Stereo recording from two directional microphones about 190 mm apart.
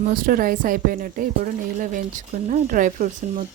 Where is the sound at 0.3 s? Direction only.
50° right (ahead or behind).